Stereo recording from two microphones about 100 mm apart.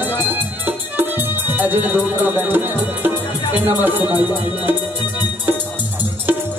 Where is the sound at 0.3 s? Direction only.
20° right (ahead or behind).